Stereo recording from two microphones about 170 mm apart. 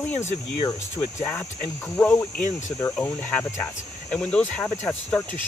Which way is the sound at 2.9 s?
5° left (ahead or behind).